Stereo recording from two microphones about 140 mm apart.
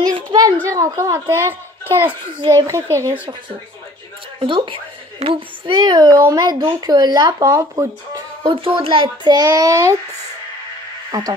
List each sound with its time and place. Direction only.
0.0 s a child's voice: 30° right (ahead or behind)
4.4 s a child's voice: 35° right (ahead or behind)
5.2 s speech: 50° right (ahead or behind)
5.8 s speech: 30° right (ahead or behind)
8.4 s a child's voice: 40° right (ahead or behind); by 9.9 s 20° right (ahead or behind)
11.1 s speech: 30° right (ahead or behind)